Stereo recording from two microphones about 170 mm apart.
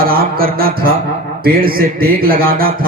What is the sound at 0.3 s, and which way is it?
A man's voice, 60° right (ahead or behind).